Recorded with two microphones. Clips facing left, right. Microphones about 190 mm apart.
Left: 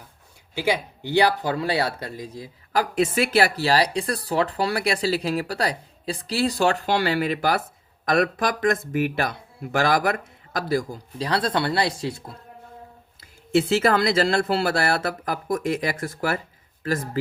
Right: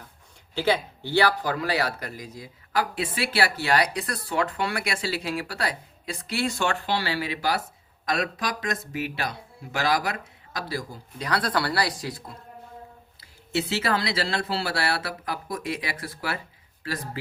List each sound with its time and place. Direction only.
0.5 s speech: 10° left (ahead or behind)
1.5 s speech: 30° left (ahead or behind); by 11.0 s 50° left (ahead or behind)
11.2 s speech: 25° left (ahead or behind)
13.7 s speech: 50° left (ahead or behind)